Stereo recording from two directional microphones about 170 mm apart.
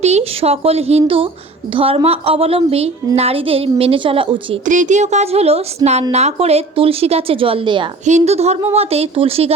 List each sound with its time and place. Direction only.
0.0 s a woman's voice: 40° right (ahead or behind)
4.6 s a woman's voice: 50° right (ahead or behind); by 7.9 s 30° right (ahead or behind)
8.0 s a woman's voice: 40° right (ahead or behind)